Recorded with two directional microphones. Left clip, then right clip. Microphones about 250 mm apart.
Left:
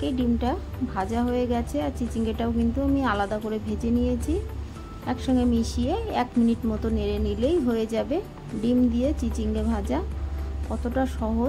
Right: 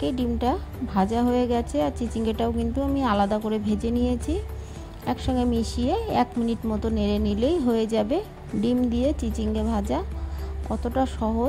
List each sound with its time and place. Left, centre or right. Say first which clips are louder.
0.0 s a woman's voice: right 1 dB; right